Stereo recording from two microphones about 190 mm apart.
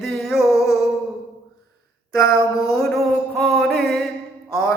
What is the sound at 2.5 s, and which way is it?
Music, 20° left (ahead or behind).